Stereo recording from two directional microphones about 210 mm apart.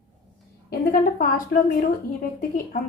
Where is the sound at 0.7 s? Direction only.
45° left (ahead or behind).